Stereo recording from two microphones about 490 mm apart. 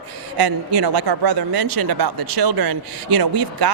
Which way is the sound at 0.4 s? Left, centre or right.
Right.